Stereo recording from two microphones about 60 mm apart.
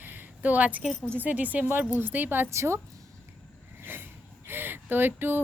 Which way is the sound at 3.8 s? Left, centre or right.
Right.